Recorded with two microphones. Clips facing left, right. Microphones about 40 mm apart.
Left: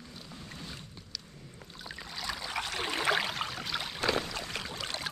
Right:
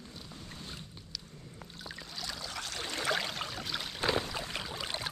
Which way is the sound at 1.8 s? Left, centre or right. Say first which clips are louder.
Left 3 dB; centre.